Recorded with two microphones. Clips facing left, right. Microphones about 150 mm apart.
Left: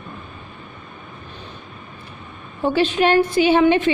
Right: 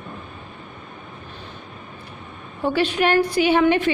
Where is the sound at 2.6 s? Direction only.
25° left (ahead or behind).